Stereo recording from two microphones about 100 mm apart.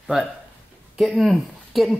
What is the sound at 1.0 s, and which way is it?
Speech, centre (ahead or behind).